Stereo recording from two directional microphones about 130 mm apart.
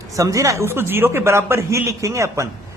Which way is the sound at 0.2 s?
25° right (ahead or behind).